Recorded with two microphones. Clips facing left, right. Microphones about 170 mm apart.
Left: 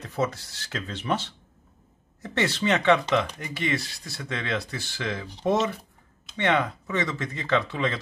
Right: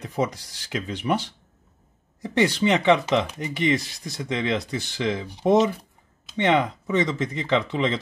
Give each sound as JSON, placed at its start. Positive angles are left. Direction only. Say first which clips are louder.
{"t": 0.0, "sound": "speech", "louder": "right 2 dB", "side_deg": -15}